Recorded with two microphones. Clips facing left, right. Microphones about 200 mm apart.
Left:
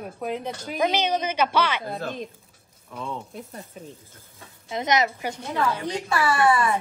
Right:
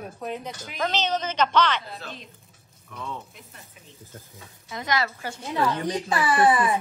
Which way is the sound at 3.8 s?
40° left (ahead or behind).